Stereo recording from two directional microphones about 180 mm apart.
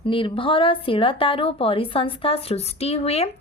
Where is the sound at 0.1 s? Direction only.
30° left (ahead or behind).